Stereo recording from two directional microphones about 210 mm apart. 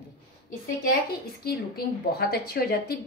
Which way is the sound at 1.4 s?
45° left (ahead or behind).